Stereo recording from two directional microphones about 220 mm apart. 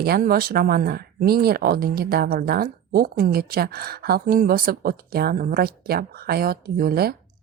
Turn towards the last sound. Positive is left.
turn(degrees=-45)  # may be behind; listen again after turning